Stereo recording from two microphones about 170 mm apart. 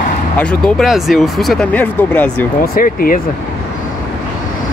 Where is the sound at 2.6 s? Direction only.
60° left (ahead or behind).